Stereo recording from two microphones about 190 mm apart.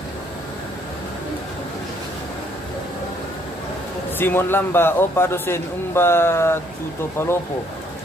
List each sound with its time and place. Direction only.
4.2 s a man's voice: 10° left (ahead or behind)